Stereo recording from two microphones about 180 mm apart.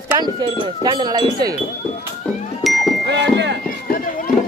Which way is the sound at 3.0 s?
75° right (ahead or behind).